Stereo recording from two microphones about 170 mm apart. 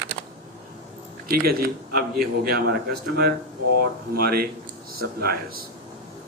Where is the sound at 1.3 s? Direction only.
60° right (ahead or behind).